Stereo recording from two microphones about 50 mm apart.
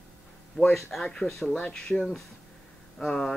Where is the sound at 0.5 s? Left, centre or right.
Centre.